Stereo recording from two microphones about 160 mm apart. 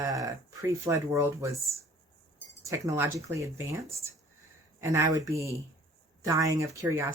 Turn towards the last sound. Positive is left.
turn(degrees=-15)  # may be behind; listen again after turning